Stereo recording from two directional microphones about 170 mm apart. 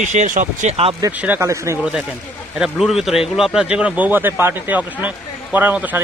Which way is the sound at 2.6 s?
Centre (ahead or behind).